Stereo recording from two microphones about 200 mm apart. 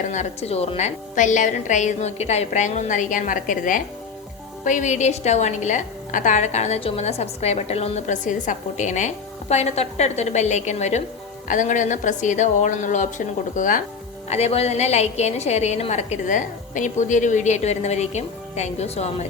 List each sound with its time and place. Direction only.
0.1 s a woman's voice: 35° left (ahead or behind)